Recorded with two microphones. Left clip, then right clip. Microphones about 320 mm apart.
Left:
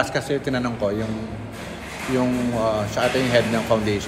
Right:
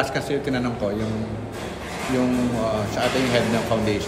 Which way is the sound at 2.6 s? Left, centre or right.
Left.